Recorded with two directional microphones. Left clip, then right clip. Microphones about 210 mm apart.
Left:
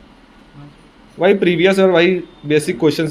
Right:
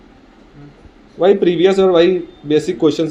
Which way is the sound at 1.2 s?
25° left (ahead or behind).